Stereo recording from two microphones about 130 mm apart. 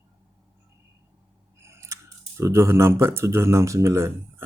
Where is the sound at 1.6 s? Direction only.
20° right (ahead or behind).